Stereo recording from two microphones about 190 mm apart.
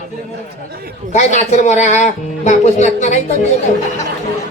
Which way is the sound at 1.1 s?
35° left (ahead or behind).